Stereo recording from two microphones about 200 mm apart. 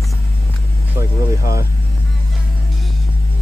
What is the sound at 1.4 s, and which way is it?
Speech, 50° left (ahead or behind).